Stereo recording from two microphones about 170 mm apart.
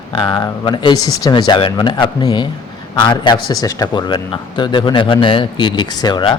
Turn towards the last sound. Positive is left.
turn(degrees=25)  # may be behind; listen again after turning